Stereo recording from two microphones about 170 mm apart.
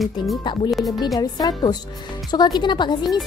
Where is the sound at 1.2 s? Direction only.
25° left (ahead or behind).